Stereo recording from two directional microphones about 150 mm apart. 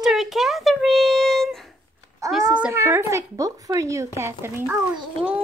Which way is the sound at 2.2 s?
20° right (ahead or behind).